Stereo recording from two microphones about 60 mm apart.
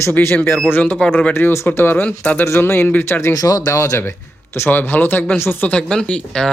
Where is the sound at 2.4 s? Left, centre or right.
Left.